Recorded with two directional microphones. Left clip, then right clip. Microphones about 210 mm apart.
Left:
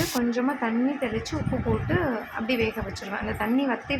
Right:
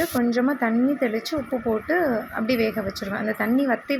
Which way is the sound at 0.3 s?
20° right (ahead or behind).